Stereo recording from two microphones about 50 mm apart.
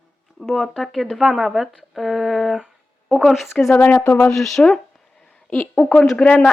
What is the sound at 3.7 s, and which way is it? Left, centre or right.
Speech, left.